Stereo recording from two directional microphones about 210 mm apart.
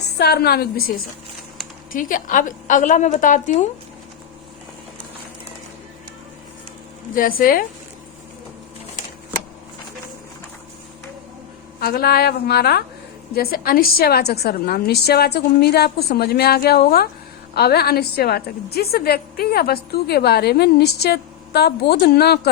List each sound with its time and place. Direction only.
0.0 s a woman's voice: 50° left (ahead or behind)
7.2 s a woman's voice: 45° left (ahead or behind)
11.8 s a woman's voice: 50° left (ahead or behind)